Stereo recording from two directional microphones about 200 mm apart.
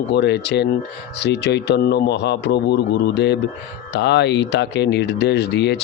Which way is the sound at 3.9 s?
60° left (ahead or behind).